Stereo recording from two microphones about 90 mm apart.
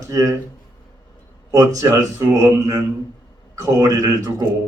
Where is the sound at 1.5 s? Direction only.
40° right (ahead or behind).